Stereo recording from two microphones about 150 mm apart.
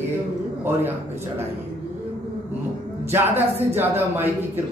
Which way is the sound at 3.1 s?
15° right (ahead or behind).